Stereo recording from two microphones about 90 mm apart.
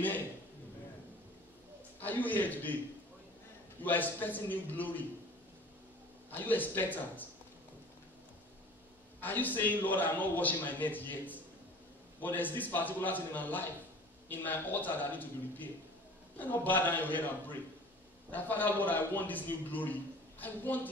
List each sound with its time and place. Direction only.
2.0 s a man's voice: 20° left (ahead or behind)
3.8 s a man's voice: 20° left (ahead or behind)
6.3 s a man's voice: 20° left (ahead or behind)
9.2 s a man's voice: 20° left (ahead or behind)